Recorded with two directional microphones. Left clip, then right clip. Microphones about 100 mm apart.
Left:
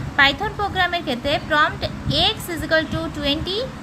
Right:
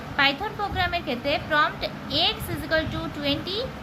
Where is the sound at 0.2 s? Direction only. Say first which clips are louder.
Left 6 dB; 35° left (ahead or behind).